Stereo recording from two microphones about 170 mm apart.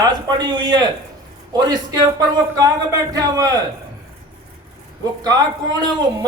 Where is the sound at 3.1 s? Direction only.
20° right (ahead or behind).